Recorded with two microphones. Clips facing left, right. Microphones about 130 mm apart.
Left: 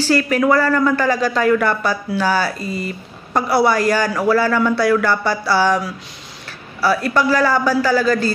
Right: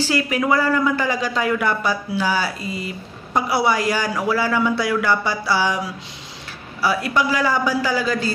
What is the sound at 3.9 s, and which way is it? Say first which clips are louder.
A man's voice: left 5 dB; 15° right (ahead or behind).